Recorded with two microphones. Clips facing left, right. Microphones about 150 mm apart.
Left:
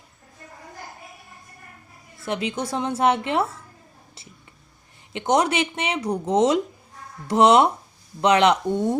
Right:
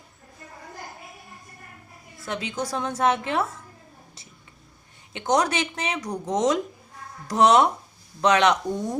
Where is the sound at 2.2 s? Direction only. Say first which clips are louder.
Left 3 dB; 25° left (ahead or behind).